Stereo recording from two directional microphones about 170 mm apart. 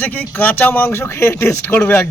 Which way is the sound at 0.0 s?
10° left (ahead or behind).